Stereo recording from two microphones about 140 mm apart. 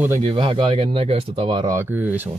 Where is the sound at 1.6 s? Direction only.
20° right (ahead or behind).